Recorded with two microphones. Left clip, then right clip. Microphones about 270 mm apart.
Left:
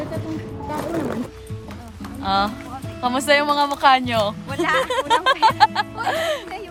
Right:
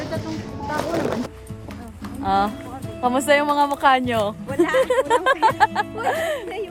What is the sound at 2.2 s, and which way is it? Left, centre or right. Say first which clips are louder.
Speech: even; centre.